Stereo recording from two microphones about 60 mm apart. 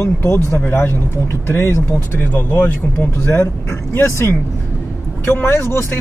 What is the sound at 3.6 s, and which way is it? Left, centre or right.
Speech, left.